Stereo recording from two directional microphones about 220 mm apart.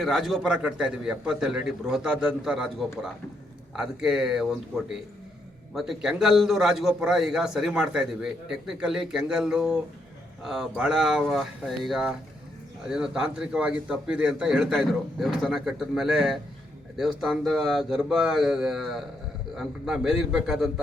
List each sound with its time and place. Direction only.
0.0 s a man's voice: centre (ahead or behind)